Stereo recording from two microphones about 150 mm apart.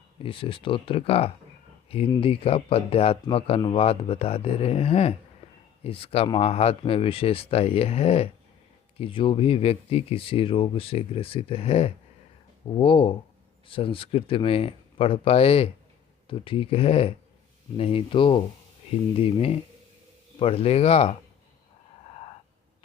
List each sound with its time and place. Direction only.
0.2 s speech: 35° left (ahead or behind)
22.0 s wheeze: 45° left (ahead or behind)